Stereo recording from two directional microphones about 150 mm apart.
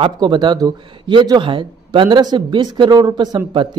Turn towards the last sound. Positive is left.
turn(degrees=-30)  # may be behind; listen again after turning